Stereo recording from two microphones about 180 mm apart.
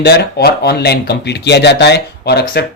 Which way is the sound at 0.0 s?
65° left (ahead or behind).